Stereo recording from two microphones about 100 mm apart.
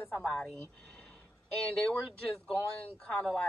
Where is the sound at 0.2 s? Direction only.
5° left (ahead or behind).